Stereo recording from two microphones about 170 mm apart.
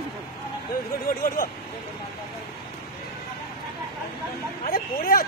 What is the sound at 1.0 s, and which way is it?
Speech, 55° left (ahead or behind).